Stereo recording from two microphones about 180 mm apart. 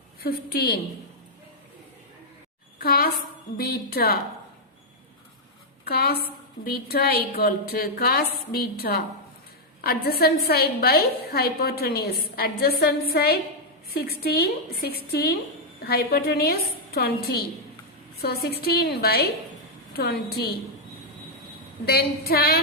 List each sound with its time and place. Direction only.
0.2 s a woman's voice: 60° left (ahead or behind)
2.7 s a sound: 55° left (ahead or behind)
3.6 s a woman's voice: 60° left (ahead or behind)
5.8 s a woman's voice: 60° left (ahead or behind)
21.8 s a woman's voice: 60° left (ahead or behind)